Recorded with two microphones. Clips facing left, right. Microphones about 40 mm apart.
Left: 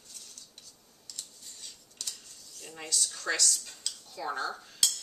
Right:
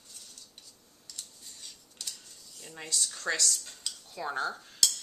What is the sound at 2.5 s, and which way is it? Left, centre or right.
Speech, centre.